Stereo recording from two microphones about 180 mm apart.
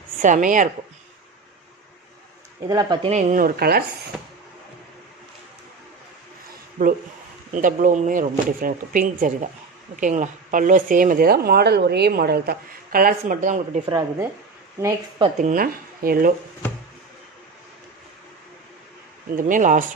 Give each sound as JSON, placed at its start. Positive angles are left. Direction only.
{"t": 0.2, "sound": "a woman's voice", "side_deg": -45}
{"t": 2.7, "sound": "speech", "side_deg": -20}
{"t": 3.1, "sound": "a woman's voice", "side_deg": -40}
{"t": 7.5, "sound": "a woman's voice", "side_deg": -45}
{"t": 13.8, "sound": "speech", "side_deg": -25}
{"t": 15.3, "sound": "a woman's voice", "side_deg": -50}
{"t": 19.3, "sound": "a woman's voice", "side_deg": -45}